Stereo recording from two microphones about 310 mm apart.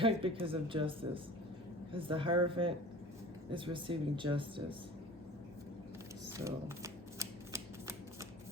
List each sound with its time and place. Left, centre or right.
0.0 s speech: centre
6.3 s shuffling cards: centre